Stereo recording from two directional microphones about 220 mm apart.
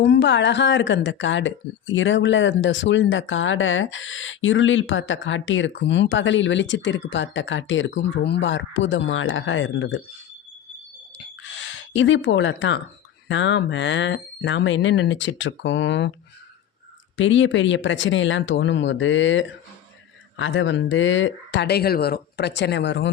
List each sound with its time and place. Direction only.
0.0 s speech: 55° left (ahead or behind)
11.2 s a sound: 55° left (ahead or behind)
13.2 s speech: 55° left (ahead or behind)
17.2 s speech: 60° left (ahead or behind)